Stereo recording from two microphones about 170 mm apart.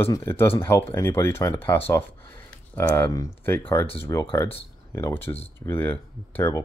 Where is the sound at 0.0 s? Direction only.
15° left (ahead or behind).